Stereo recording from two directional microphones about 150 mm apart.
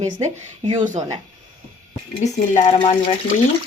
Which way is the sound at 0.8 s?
55° right (ahead or behind).